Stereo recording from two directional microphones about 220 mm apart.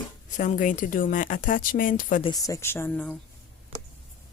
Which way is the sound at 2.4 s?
15° left (ahead or behind).